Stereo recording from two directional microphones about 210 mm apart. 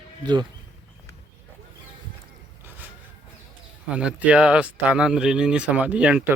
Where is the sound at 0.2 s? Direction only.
20° right (ahead or behind).